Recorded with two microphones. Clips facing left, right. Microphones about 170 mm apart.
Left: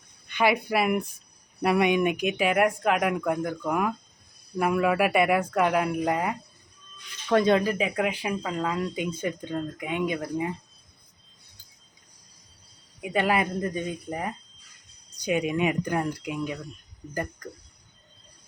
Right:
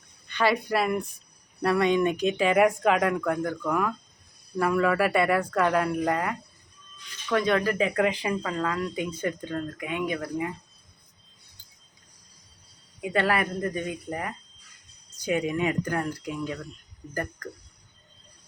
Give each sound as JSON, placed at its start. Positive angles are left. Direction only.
{"t": 0.3, "sound": "speech", "side_deg": 15}
{"t": 2.6, "sound": "speech", "side_deg": 0}
{"t": 3.0, "sound": "speech", "side_deg": 15}
{"t": 7.4, "sound": "speech", "side_deg": 20}
{"t": 13.0, "sound": "speech", "side_deg": 15}